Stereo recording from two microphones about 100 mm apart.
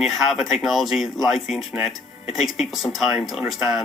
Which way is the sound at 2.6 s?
Centre (ahead or behind).